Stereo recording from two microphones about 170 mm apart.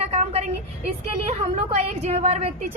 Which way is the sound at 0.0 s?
35° right (ahead or behind).